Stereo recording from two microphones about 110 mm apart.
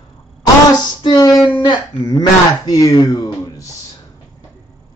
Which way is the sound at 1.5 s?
45° left (ahead or behind).